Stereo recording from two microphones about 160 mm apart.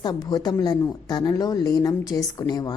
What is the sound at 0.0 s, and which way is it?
Speech, 25° left (ahead or behind).